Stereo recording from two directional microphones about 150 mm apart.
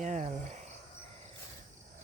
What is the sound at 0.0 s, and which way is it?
Cricket, 50° right (ahead or behind).